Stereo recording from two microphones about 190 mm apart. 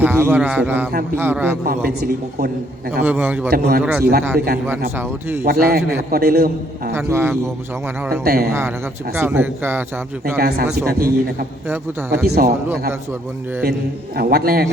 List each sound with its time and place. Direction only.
0.0 s speech: 10° right (ahead or behind)
1.6 s speech: 55° right (ahead or behind)
3.0 s speech: 10° right (ahead or behind)
3.5 s speech: 50° right (ahead or behind)
4.9 s speech: 10° right (ahead or behind)
5.5 s speech: 55° right (ahead or behind)
6.9 s speech: 10° right (ahead or behind)
8.1 s speech: 55° right (ahead or behind)
9.1 s speech: 10° right (ahead or behind)
10.3 s speech: 55° right (ahead or behind)
14.2 s speech: 55° right (ahead or behind)